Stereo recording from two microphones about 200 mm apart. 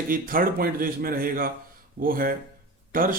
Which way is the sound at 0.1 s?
45° right (ahead or behind).